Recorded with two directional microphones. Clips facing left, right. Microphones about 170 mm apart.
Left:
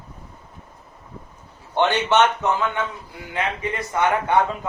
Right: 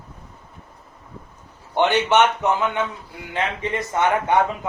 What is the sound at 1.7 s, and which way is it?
A man's voice, 15° right (ahead or behind).